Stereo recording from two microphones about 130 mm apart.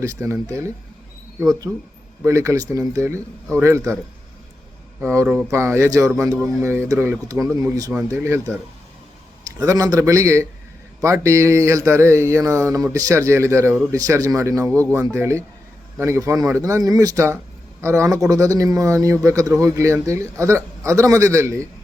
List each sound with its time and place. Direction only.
0.0 s speech: 25° right (ahead or behind)
5.0 s speech: 25° right (ahead or behind)
9.6 s speech: 25° right (ahead or behind)